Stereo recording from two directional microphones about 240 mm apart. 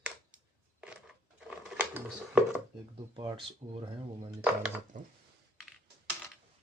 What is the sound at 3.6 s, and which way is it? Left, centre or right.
Speech, right.